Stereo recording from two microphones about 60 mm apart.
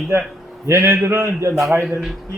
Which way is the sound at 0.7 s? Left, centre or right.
Right.